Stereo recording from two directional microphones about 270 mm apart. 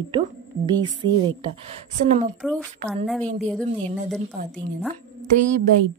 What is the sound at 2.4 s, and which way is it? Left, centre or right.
Speech, centre.